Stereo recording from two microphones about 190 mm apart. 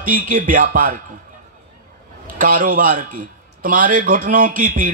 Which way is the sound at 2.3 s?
50° right (ahead or behind).